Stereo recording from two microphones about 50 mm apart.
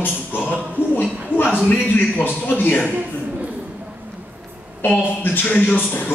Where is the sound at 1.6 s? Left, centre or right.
Left.